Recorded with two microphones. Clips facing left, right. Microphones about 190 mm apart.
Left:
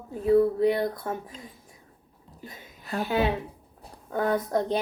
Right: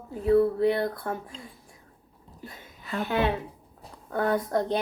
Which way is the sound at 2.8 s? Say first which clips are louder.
Left 1 dB; 40° left (ahead or behind).